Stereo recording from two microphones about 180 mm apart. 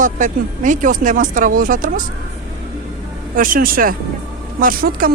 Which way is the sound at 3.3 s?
50° right (ahead or behind).